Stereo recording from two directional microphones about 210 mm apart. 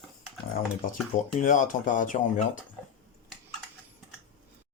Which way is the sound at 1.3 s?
35° left (ahead or behind).